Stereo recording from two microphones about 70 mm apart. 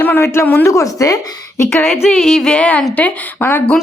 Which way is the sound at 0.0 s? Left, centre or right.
Left.